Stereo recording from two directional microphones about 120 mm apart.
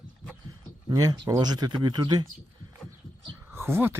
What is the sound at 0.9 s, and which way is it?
Speech, 30° right (ahead or behind).